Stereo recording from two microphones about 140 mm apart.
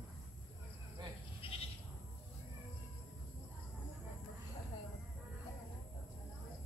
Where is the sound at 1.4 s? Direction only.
40° left (ahead or behind).